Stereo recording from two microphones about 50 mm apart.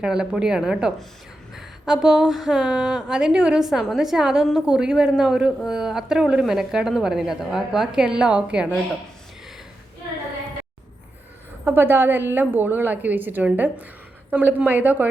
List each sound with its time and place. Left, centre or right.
0.0 s a woman's voice: centre
11.6 s a woman's voice: right